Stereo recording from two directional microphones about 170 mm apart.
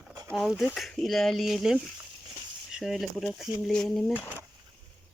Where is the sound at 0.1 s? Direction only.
20° right (ahead or behind).